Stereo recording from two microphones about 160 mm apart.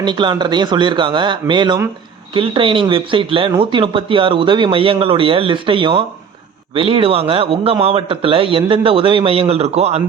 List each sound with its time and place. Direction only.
0.0 s a man's voice: 30° right (ahead or behind)